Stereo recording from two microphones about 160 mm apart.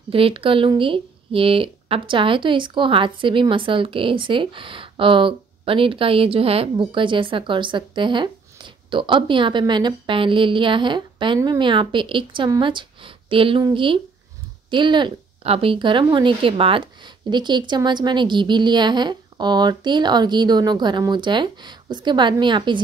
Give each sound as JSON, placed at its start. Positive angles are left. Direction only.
{"t": 0.1, "sound": "speech", "side_deg": -35}